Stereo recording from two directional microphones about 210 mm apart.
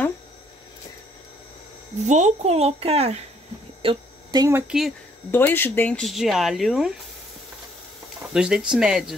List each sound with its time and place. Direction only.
2.0 s speech: 35° right (ahead or behind); by 6.9 s centre (ahead or behind)
8.3 s speech: 5° right (ahead or behind)